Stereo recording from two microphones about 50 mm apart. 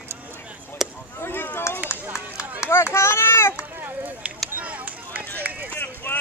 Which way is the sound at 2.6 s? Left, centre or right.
Left.